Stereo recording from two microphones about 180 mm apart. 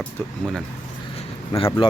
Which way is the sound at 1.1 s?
30° left (ahead or behind).